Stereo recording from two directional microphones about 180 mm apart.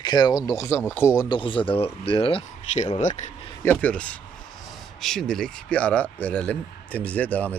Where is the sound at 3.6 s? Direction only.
10° left (ahead or behind).